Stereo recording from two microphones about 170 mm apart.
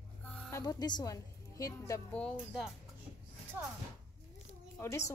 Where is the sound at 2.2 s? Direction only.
Centre (ahead or behind).